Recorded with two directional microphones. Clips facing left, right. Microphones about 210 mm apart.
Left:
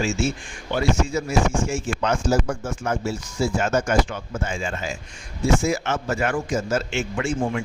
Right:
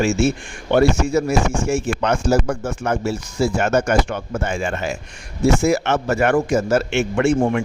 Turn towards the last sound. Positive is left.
turn(degrees=-65)  # may be behind; listen again after turning